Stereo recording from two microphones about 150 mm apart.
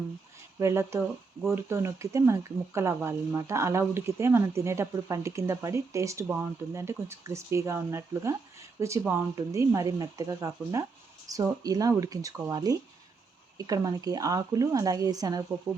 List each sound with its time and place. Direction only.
0.6 s speech: 20° right (ahead or behind)